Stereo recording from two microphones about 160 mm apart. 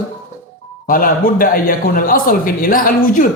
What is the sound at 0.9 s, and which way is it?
Speech, 60° left (ahead or behind).